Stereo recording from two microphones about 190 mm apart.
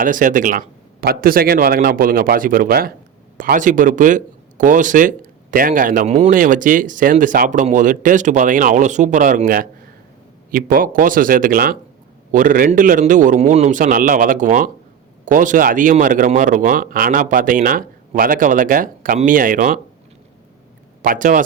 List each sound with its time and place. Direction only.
0.0 s speech: 45° right (ahead or behind)
21.0 s speech: 45° right (ahead or behind)